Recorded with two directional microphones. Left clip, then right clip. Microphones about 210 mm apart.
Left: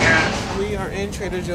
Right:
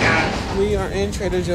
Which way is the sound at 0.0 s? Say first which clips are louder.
Left 1 dB; 10° left (ahead or behind).